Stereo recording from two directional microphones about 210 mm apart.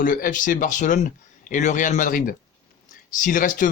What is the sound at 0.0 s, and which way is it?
Speech, 40° left (ahead or behind).